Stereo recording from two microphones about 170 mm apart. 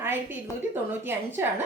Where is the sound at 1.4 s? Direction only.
15° right (ahead or behind).